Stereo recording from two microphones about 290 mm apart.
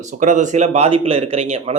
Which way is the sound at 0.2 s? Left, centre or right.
Right.